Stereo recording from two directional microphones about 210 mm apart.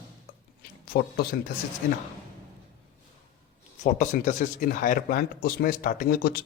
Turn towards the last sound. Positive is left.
turn(degrees=45)  # may be behind; listen again after turning